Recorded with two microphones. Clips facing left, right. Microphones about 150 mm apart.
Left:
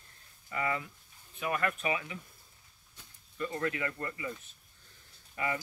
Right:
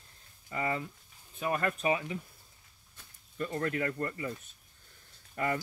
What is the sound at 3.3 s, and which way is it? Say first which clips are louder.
Speech: right 1 dB; 45° right (ahead or behind).